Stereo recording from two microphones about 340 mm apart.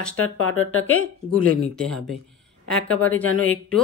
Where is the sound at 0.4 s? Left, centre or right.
Left.